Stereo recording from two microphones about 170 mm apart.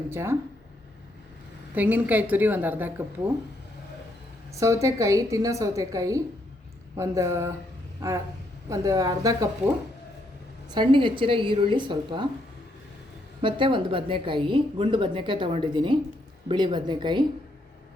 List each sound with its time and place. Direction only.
0.1 s a woman's voice: 15° right (ahead or behind)
1.7 s a woman's voice: 10° right (ahead or behind)
4.5 s a woman's voice: 20° right (ahead or behind)
8.7 s a woman's voice: 20° right (ahead or behind)
10.7 s a woman's voice: 30° right (ahead or behind)
13.4 s a woman's voice: 30° right (ahead or behind)